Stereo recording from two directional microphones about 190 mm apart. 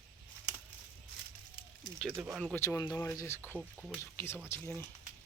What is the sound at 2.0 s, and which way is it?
Speech, 10° right (ahead or behind).